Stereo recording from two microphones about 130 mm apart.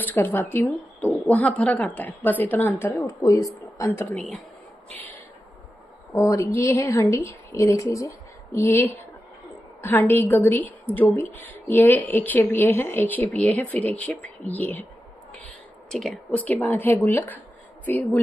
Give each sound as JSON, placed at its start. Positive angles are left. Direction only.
{"t": 0.0, "sound": "a woman's voice", "side_deg": 15}
{"t": 3.0, "sound": "a woman's voice", "side_deg": 25}
{"t": 6.1, "sound": "a woman's voice", "side_deg": 25}
{"t": 15.3, "sound": "a sound", "side_deg": 10}
{"t": 16.3, "sound": "a woman's voice", "side_deg": 15}